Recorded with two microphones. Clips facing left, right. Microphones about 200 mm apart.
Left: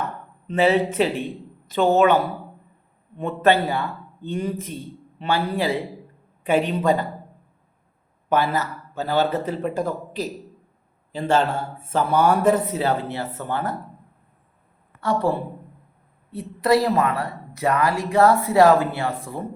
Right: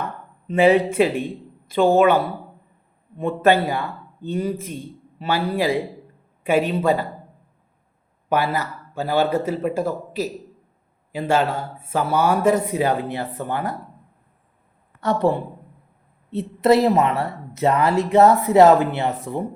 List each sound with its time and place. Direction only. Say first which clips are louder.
0.4 s a woman's voice: right 3 dB; 10° right (ahead or behind)
3.2 s speech: right 1 dB; 10° right (ahead or behind)
8.3 s speech: even; 10° right (ahead or behind)
15.0 s speech: right 2 dB; 20° right (ahead or behind)